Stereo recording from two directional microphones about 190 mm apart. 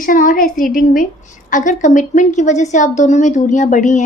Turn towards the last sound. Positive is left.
turn(degrees=40)  # may be behind; listen again after turning